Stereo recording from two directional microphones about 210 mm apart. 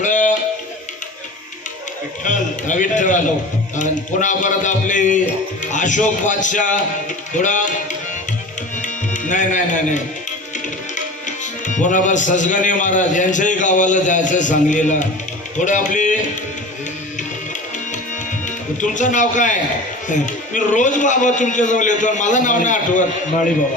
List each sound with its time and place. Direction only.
0.0 s music: 35° left (ahead or behind)
2.2 s a man's voice: 35° left (ahead or behind)
8.8 s music: 35° left (ahead or behind)
10.9 s speech: 35° left (ahead or behind)
15.5 s music: 35° left (ahead or behind)
18.4 s a man's voice: 35° left (ahead or behind)